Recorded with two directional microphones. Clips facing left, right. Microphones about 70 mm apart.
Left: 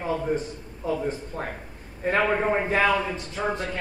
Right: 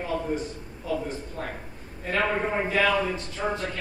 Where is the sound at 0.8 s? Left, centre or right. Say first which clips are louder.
Left 2 dB; left.